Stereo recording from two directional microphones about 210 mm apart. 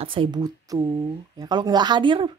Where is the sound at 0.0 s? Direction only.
25° right (ahead or behind).